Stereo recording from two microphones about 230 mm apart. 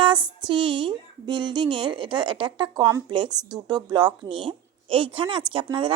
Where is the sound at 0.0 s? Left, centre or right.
Centre.